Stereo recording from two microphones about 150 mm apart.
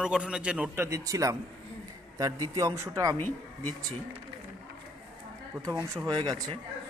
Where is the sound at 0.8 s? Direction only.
20° right (ahead or behind).